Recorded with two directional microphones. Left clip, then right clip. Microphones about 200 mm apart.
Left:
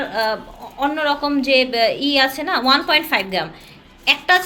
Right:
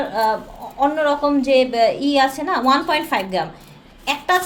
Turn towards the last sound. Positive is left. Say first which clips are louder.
# left 4 dB
turn(degrees=0)  # may be behind; listen again after turning